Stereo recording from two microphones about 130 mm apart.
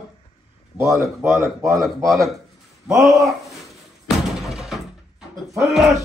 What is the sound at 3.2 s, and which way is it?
Speech, centre (ahead or behind).